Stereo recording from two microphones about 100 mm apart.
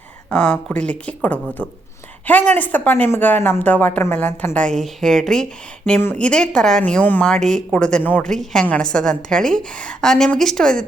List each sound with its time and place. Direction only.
0.3 s speech: 15° left (ahead or behind)
7.3 s a woman's voice: 5° left (ahead or behind)